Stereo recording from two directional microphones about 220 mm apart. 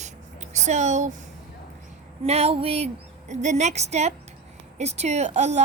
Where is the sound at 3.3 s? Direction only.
30° right (ahead or behind).